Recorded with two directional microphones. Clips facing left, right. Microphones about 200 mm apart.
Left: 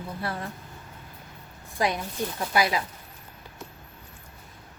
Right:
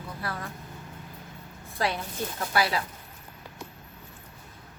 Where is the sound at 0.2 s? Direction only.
25° left (ahead or behind).